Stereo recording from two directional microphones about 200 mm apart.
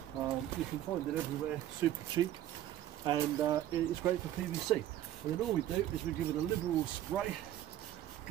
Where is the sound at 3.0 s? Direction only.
20° right (ahead or behind).